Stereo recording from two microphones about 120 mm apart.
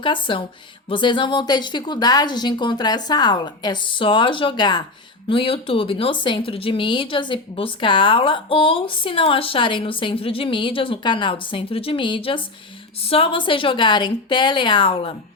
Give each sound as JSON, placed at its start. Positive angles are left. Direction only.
{"t": 0.0, "sound": "speech", "side_deg": 45}